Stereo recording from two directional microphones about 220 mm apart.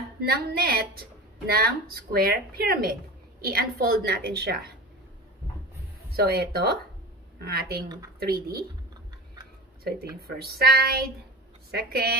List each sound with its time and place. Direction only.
0.2 s a woman's voice: 45° right (ahead or behind)
6.1 s a woman's voice: 45° right (ahead or behind)
9.8 s a woman's voice: 45° right (ahead or behind)